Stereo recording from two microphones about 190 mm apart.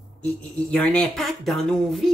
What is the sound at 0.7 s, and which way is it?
Speech, 5° left (ahead or behind).